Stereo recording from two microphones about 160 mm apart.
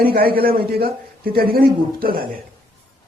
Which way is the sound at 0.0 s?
70° right (ahead or behind).